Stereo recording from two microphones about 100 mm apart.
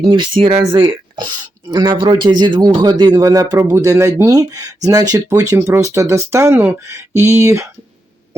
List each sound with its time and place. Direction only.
0.0 s a man's voice: 50° right (ahead or behind)
0.3 s speech: 70° right (ahead or behind)
0.6 s a man's voice: 50° right (ahead or behind)
3.2 s speech: 35° right (ahead or behind)
4.3 s speech: 40° right (ahead or behind)